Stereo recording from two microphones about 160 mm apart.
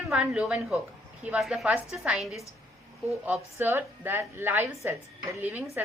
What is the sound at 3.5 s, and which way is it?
Speech, 15° right (ahead or behind).